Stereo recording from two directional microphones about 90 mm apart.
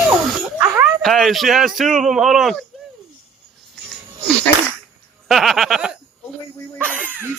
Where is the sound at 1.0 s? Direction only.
5° left (ahead or behind).